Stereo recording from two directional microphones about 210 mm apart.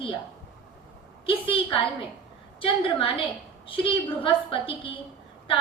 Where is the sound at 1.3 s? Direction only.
25° left (ahead or behind).